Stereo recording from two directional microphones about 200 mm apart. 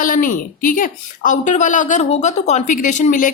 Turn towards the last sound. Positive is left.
turn(degrees=40)  # may be behind; listen again after turning